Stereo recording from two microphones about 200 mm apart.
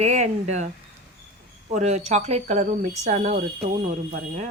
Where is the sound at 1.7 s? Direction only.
35° right (ahead or behind).